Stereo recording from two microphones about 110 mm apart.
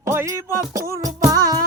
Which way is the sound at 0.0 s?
25° right (ahead or behind).